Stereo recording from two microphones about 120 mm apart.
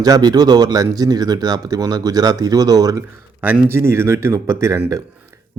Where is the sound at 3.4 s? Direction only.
15° right (ahead or behind).